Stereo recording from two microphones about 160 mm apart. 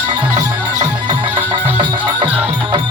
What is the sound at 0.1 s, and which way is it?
Music, 25° right (ahead or behind).